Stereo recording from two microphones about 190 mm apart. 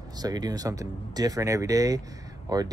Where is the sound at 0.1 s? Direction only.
20° right (ahead or behind).